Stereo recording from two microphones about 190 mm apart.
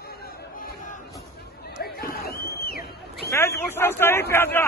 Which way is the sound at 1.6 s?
55° left (ahead or behind).